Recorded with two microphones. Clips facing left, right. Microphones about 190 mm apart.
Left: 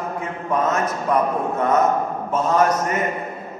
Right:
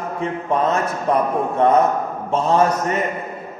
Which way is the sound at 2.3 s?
25° right (ahead or behind).